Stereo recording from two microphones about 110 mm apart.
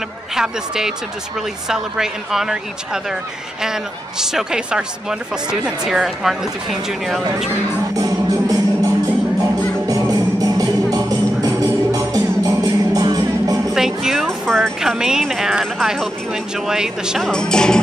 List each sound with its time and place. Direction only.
0.4 s a woman's voice: 5° right (ahead or behind)
7.9 s music: 30° right (ahead or behind)
13.7 s a woman's voice: 5° right (ahead or behind)
17.3 s music: 5° left (ahead or behind)